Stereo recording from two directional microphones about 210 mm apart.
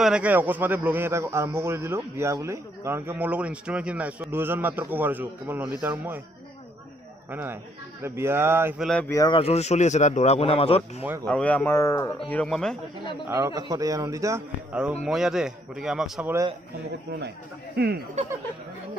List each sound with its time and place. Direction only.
0.0 s a man's voice: 5° right (ahead or behind)
7.2 s a man's voice: 10° right (ahead or behind)
8.8 s a man's voice: 5° left (ahead or behind)
9.1 s speech: 20° left (ahead or behind)
11.2 s speech: 5° left (ahead or behind)
13.3 s a man's voice: 15° right (ahead or behind)
14.7 s a man's voice: 5° right (ahead or behind)
17.7 s speech: 50° right (ahead or behind)